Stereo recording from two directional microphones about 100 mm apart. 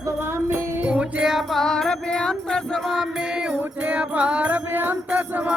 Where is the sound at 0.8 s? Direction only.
10° right (ahead or behind).